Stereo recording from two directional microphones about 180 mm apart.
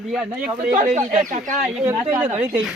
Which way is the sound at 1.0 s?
45° right (ahead or behind).